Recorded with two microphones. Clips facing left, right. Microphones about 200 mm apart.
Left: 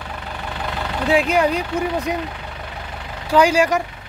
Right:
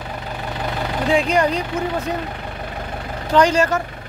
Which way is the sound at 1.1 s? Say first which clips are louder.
Left 1 dB; 5° left (ahead or behind).